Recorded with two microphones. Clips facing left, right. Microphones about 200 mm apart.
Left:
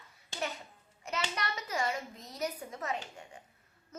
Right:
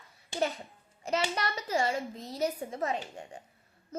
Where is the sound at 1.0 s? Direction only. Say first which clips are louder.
Right 6 dB; 30° right (ahead or behind).